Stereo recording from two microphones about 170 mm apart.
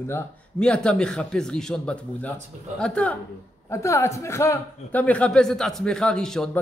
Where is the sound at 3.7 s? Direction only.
15° left (ahead or behind).